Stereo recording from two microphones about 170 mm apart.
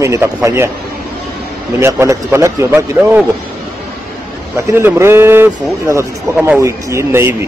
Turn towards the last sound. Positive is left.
turn(degrees=-15)  # may be behind; listen again after turning